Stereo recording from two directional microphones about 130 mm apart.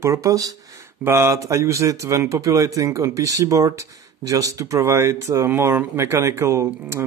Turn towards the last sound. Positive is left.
turn(degrees=-20)  # may be behind; listen again after turning